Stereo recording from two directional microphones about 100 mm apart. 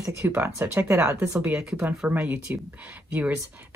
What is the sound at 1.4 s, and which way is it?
Speech, 15° right (ahead or behind).